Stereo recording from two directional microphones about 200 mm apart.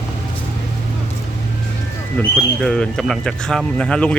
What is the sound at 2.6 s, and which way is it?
Speech, 5° left (ahead or behind).